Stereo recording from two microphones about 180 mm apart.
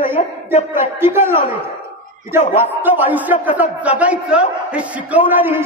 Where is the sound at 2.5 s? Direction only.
10° right (ahead or behind).